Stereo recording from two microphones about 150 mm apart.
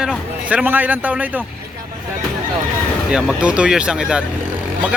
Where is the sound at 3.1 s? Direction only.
5° right (ahead or behind).